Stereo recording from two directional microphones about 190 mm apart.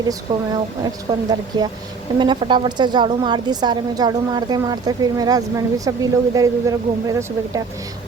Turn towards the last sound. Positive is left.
turn(degrees=-15)  # may be behind; listen again after turning